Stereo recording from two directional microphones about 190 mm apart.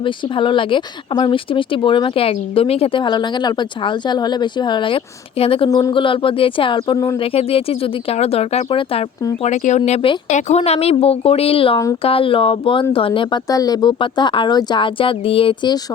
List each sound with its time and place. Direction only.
0.0 s speech: 25° left (ahead or behind)
5.6 s speech: 20° left (ahead or behind)
7.3 s speech: 30° left (ahead or behind)